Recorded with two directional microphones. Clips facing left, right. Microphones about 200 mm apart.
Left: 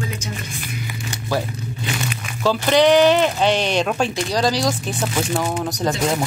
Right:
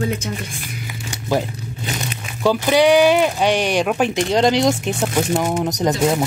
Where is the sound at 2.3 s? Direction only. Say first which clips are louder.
Right 1 dB; 15° right (ahead or behind).